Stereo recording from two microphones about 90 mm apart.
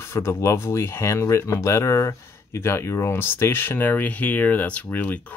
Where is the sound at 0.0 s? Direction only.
30° left (ahead or behind).